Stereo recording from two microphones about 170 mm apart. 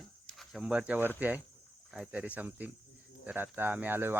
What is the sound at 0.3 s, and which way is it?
Speech, 5° right (ahead or behind).